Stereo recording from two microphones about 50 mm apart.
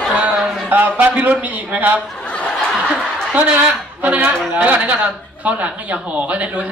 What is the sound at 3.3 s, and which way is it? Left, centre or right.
A man's voice, right.